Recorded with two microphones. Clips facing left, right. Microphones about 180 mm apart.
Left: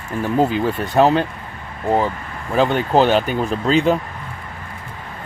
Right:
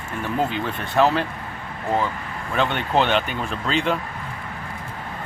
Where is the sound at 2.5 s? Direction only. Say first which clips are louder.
Left 6 dB; 40° left (ahead or behind).